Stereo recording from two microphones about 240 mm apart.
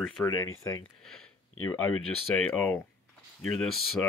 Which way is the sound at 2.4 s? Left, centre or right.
Centre.